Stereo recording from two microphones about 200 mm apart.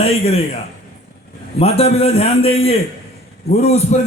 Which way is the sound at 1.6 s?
30° left (ahead or behind).